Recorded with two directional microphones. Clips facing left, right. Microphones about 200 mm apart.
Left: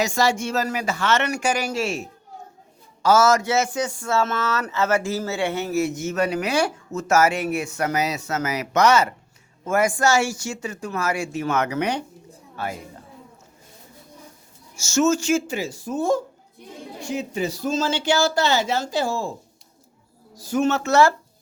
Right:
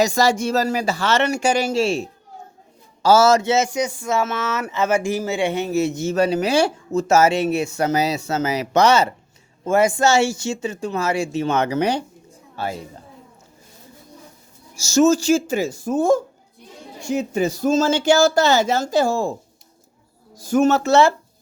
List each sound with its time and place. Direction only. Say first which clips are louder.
0.0 s a man's voice: right 4 dB; 40° right (ahead or behind)
14.8 s speech: right 4 dB; 35° right (ahead or behind)
20.3 s speech: right 5 dB; 50° right (ahead or behind)